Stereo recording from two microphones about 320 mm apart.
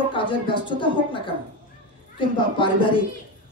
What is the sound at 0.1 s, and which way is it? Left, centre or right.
Speech, centre.